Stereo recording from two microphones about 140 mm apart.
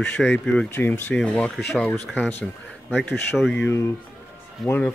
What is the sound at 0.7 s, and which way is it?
Speech, 15° left (ahead or behind).